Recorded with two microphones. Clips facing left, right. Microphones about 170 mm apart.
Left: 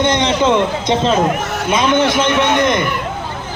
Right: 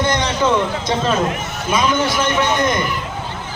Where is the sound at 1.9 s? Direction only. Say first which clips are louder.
Left 4 dB; 65° left (ahead or behind).